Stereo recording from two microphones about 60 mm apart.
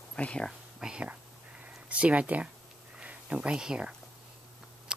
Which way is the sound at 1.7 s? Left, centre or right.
Right.